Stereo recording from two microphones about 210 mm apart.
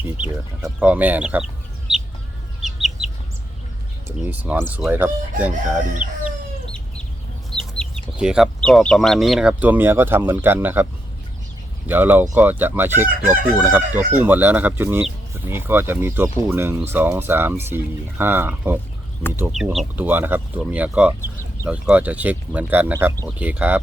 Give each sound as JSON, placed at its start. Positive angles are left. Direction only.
{"t": 0.0, "sound": "speech", "side_deg": -5}
{"t": 2.6, "sound": "chicken", "side_deg": 0}
{"t": 4.0, "sound": "speech", "side_deg": -10}
{"t": 5.9, "sound": "speech", "side_deg": -40}
{"t": 7.5, "sound": "chicken", "side_deg": -20}
{"t": 8.1, "sound": "speech", "side_deg": -5}
{"t": 11.9, "sound": "speech", "side_deg": -10}